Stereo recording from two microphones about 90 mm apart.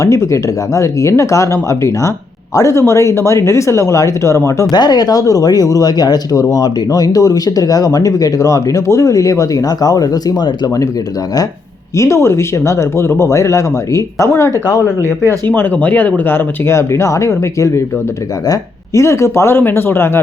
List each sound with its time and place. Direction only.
0.0 s speech: 35° left (ahead or behind)
4.7 s speech: 50° left (ahead or behind)
11.9 s speech: 35° left (ahead or behind)